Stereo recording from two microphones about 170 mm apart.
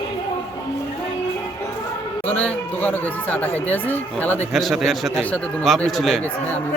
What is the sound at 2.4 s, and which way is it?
A man's voice, 10° left (ahead or behind).